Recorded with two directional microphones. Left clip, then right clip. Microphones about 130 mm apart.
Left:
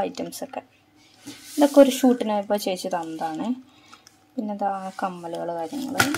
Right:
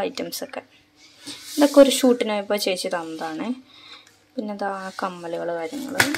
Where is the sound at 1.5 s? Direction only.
5° left (ahead or behind).